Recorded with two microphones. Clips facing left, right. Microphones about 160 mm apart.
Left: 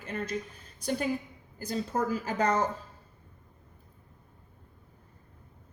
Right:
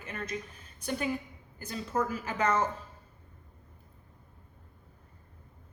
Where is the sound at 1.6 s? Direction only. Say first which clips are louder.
Left 2 dB; 35° left (ahead or behind).